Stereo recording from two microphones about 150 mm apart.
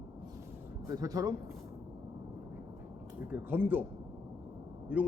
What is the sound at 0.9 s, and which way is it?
Speech, 25° right (ahead or behind).